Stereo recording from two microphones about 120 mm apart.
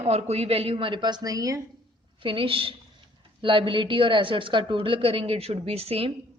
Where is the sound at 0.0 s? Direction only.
60° right (ahead or behind); by 1.6 s 30° right (ahead or behind).